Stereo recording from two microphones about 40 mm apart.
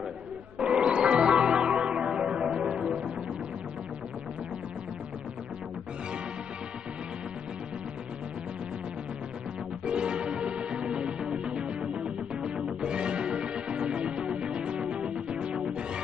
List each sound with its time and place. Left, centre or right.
0.7 s music: right
9.8 s music: right